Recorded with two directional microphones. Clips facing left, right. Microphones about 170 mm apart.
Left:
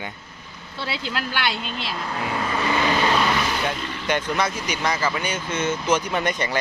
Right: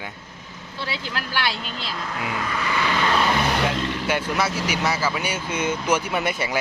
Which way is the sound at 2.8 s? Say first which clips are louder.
Left 1 dB; 25° left (ahead or behind).